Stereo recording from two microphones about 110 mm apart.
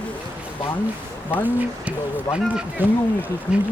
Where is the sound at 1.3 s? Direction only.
15° right (ahead or behind).